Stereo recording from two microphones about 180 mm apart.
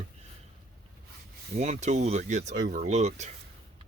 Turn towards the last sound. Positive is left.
turn(degrees=-40)  # may be behind; listen again after turning